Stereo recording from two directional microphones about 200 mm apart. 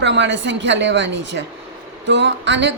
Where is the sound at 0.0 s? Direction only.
65° right (ahead or behind).